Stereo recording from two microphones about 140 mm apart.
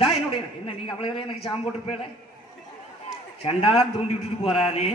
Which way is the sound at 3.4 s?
40° left (ahead or behind).